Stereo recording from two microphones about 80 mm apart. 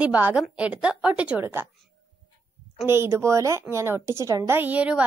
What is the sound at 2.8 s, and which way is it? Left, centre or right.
A woman's voice, right.